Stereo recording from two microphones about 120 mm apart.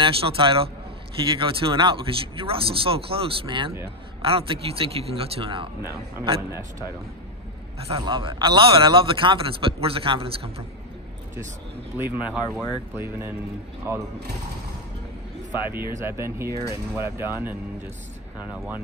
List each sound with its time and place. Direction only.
0.0 s speech: 50° right (ahead or behind)
8.0 s speech: 45° right (ahead or behind)
12.0 s speech: 15° right (ahead or behind)
12.9 s speech: 20° right (ahead or behind)
15.6 s speech: 15° right (ahead or behind)